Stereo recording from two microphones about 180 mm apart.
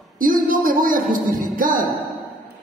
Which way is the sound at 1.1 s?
50° right (ahead or behind).